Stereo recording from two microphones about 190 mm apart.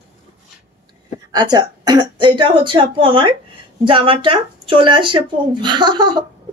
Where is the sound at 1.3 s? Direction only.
20° right (ahead or behind).